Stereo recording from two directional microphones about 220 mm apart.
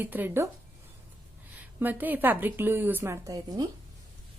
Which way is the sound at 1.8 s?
10° right (ahead or behind).